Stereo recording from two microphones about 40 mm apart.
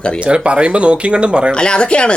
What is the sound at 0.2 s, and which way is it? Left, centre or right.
Speech, right.